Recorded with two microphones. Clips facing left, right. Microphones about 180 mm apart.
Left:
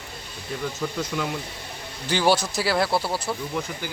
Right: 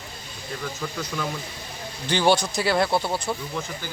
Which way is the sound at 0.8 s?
15° left (ahead or behind).